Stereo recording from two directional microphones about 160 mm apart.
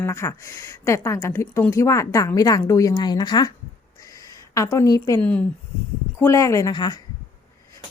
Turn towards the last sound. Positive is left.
turn(degrees=25)  # may be behind; listen again after turning